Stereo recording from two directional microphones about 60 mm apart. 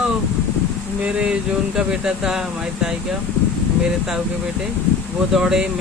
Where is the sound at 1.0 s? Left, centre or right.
Centre.